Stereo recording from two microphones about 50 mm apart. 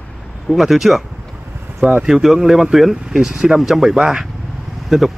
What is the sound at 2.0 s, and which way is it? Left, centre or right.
Speech, centre.